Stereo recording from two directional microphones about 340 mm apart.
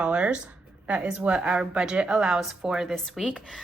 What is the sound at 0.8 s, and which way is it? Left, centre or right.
A woman's voice, centre.